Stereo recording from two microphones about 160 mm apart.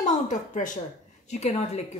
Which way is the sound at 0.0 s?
50° left (ahead or behind).